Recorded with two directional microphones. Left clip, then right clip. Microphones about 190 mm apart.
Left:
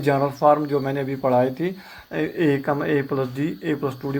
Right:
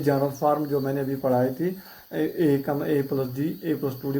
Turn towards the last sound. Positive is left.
turn(degrees=25)  # may be behind; listen again after turning